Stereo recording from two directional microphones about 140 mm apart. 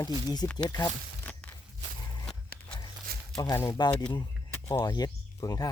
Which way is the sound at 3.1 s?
90° right.